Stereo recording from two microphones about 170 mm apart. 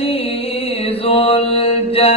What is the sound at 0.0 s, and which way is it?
Mantra, 35° left (ahead or behind).